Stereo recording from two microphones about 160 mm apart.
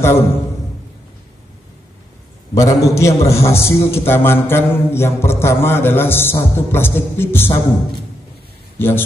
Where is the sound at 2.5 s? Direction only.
20° left (ahead or behind).